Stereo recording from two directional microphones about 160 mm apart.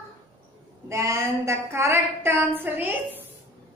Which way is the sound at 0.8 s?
20° right (ahead or behind).